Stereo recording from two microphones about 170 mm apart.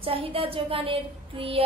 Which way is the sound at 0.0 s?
30° right (ahead or behind).